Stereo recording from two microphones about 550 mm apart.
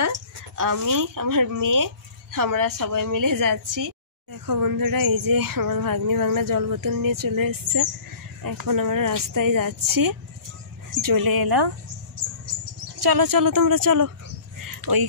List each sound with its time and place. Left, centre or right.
0.0 s a woman's voice: right
13.0 s speech: right
14.6 s a sound: right